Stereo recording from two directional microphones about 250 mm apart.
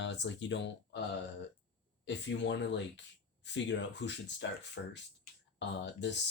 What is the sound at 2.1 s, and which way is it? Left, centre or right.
Speech, left.